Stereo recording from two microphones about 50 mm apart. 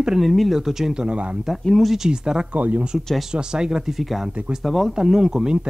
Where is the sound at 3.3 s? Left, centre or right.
Centre.